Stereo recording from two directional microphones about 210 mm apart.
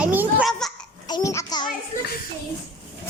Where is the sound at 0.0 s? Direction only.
5° right (ahead or behind).